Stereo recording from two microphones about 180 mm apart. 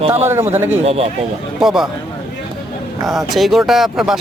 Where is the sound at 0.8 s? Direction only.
35° right (ahead or behind).